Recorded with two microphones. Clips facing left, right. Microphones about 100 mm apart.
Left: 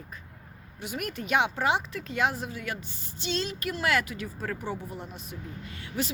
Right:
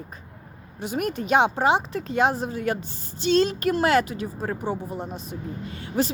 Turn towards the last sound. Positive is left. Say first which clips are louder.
# right 8 dB
turn(degrees=-35)  # may be behind; listen again after turning